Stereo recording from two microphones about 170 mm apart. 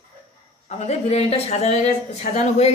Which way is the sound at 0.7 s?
40° left (ahead or behind).